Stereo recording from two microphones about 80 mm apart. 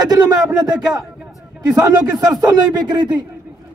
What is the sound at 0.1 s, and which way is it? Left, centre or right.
Speech, right.